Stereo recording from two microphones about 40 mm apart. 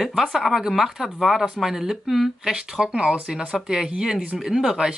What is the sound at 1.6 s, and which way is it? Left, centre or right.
Speech, centre.